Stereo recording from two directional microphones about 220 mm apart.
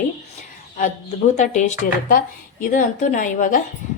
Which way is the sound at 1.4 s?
35° left (ahead or behind).